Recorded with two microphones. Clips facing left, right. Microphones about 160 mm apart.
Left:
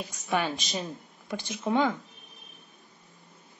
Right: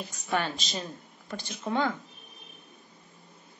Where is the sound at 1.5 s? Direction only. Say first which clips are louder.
Left 3 dB; 10° left (ahead or behind).